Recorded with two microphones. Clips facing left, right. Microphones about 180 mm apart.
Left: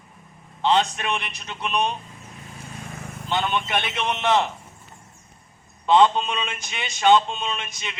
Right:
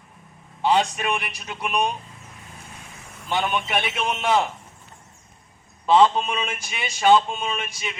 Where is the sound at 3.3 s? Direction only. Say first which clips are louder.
Even; 10° right (ahead or behind).